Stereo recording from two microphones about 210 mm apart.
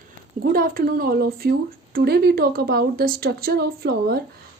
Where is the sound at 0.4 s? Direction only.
45° right (ahead or behind).